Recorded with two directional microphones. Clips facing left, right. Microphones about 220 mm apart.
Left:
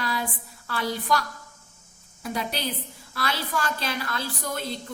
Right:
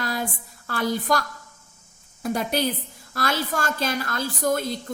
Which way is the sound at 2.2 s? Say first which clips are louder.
Right 6 dB; 45° right (ahead or behind).